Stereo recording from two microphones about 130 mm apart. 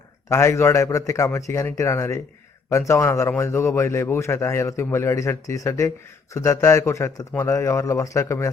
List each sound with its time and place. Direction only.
0.3 s speech: 20° left (ahead or behind)